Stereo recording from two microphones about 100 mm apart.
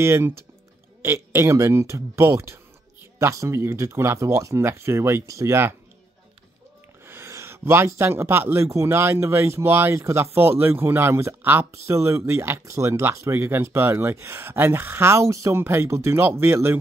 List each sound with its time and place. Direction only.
0.0 s speech: 25° right (ahead or behind)
7.1 s speech: 25° right (ahead or behind)